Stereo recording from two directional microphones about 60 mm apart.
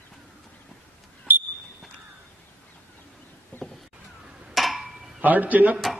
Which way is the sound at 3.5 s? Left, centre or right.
Left.